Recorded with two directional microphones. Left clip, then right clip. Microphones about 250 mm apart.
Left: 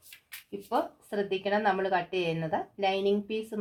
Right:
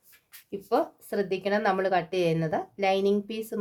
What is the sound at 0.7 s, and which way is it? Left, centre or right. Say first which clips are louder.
A woman's voice: right 4 dB; right.